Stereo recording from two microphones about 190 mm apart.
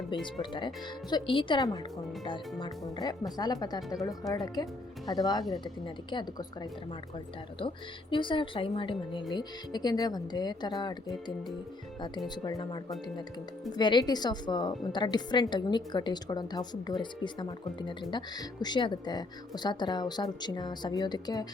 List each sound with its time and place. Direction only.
0.1 s a woman's voice: 25° left (ahead or behind)
8.1 s a woman's voice: 25° left (ahead or behind)
11.9 s a woman's voice: 25° left (ahead or behind)